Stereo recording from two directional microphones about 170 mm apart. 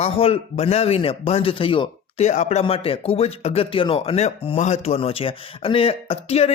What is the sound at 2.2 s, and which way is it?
Speech, 45° left (ahead or behind).